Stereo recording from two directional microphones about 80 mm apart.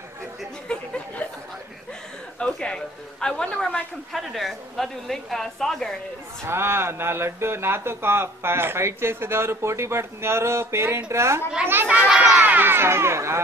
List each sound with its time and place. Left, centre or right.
0.7 s a sound: centre
2.3 s a man's voice: centre
6.4 s a child's voice: right
12.0 s a child's voice: centre
12.4 s speech: right